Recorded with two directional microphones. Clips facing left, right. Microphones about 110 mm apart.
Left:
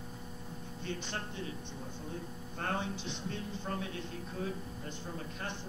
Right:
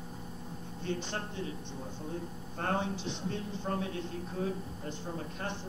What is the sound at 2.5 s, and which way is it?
Speech, 35° right (ahead or behind).